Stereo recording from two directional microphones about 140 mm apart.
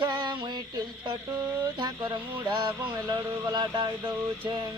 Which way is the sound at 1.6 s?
30° right (ahead or behind).